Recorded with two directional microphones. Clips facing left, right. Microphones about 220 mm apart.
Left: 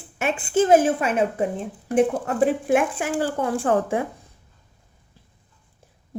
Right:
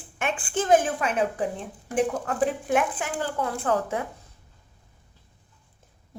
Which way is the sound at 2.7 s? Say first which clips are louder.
Left 4 dB; 10° left (ahead or behind).